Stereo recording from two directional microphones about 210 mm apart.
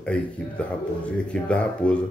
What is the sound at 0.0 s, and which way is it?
Speech, 5° left (ahead or behind).